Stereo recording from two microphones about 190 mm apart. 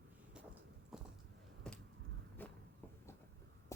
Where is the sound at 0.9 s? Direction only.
Centre (ahead or behind).